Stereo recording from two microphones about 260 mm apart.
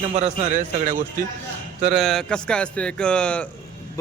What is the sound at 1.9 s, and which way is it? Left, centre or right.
A man's voice, centre.